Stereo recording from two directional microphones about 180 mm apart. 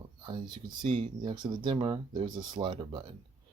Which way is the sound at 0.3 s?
25° right (ahead or behind).